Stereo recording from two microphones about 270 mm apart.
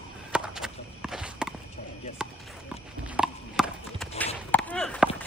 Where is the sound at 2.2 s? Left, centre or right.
Centre.